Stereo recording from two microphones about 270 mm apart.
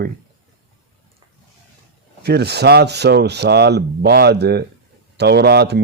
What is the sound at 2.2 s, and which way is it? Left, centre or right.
Speech, right.